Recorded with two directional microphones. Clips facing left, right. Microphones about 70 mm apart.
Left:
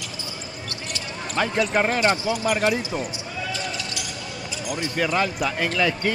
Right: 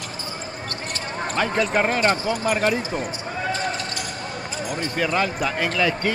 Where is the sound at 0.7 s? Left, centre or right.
Right.